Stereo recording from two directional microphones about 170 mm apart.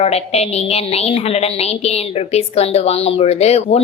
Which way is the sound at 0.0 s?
40° left (ahead or behind).